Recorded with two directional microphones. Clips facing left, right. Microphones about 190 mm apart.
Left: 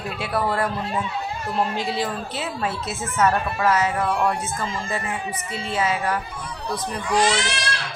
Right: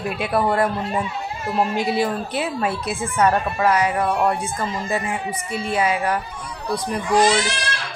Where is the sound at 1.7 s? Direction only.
10° right (ahead or behind).